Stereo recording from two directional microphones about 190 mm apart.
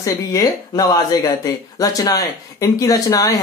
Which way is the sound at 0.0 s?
15° left (ahead or behind).